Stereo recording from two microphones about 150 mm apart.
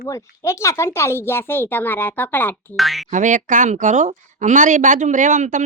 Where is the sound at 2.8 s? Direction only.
Centre (ahead or behind).